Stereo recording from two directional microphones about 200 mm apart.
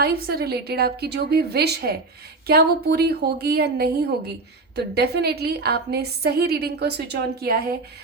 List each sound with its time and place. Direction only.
0.0 s a woman's voice: 50° right (ahead or behind)